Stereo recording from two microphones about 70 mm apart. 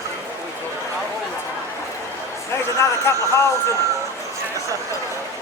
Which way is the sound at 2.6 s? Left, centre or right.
Left.